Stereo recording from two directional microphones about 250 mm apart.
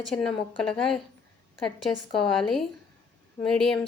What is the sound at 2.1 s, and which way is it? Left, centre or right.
A woman's voice, centre.